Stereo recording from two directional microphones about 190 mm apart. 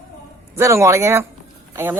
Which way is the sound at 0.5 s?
15° right (ahead or behind).